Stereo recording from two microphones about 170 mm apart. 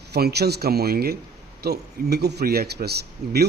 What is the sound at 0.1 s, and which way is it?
A man's voice, 70° right (ahead or behind).